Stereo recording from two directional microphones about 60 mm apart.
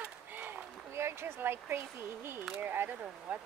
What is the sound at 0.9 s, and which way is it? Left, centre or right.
Speech, right.